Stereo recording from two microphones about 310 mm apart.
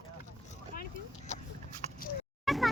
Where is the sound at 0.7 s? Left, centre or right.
Left.